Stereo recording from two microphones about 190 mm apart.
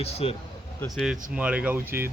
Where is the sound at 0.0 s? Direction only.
30° left (ahead or behind).